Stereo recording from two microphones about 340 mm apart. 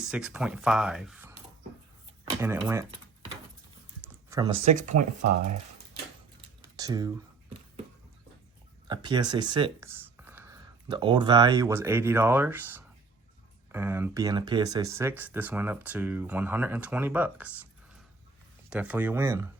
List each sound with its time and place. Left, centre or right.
0.0 s speech: centre
2.4 s speech: centre
4.0 s speech: centre
6.7 s a sound: centre
8.9 s speech: centre
18.7 s speech: centre